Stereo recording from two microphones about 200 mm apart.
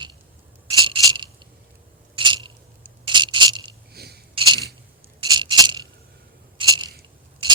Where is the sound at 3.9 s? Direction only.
55° right (ahead or behind).